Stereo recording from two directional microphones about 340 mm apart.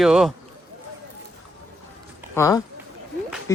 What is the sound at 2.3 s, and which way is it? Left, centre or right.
Speech, centre.